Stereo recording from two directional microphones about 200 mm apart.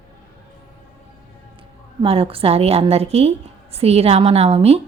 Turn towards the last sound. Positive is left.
turn(degrees=-30)  # may be behind; listen again after turning